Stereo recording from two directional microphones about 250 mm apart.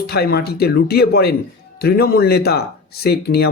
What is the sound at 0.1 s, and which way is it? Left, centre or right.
Speech, left.